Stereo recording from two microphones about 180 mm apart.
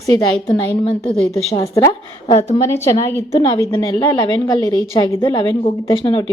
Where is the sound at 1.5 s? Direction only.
20° left (ahead or behind).